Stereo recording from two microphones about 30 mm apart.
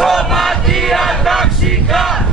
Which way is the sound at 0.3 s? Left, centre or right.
Centre.